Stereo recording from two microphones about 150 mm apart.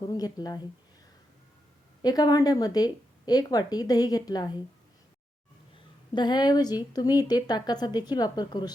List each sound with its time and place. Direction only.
0.1 s speech: 25° left (ahead or behind)
2.0 s speech: 25° left (ahead or behind)
6.1 s speech: 30° left (ahead or behind)